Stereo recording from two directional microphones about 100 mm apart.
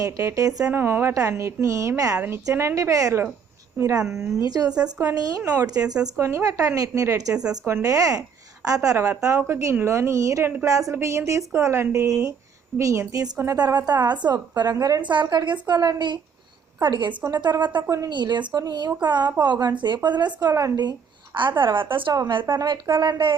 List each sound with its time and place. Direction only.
0.0 s a woman's voice: 30° right (ahead or behind)
0.7 s a woman's voice: 20° right (ahead or behind)
2.1 s a woman's voice: 20° right (ahead or behind); by 4.7 s 40° right (ahead or behind)
4.7 s speech: 10° right (ahead or behind)
5.0 s a woman's voice: 35° right (ahead or behind)
6.1 s a woman's voice: 25° right (ahead or behind)
13.6 s a woman's voice: 40° right (ahead or behind)
17.8 s a woman's voice: 30° right (ahead or behind)
18.1 s a woman's voice: 50° right (ahead or behind)
21.3 s speech: 50° right (ahead or behind)